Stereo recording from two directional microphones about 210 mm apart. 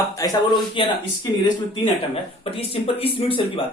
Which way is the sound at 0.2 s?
20° left (ahead or behind).